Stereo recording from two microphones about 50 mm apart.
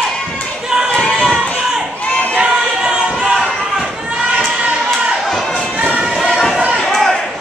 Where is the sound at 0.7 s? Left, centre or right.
Centre.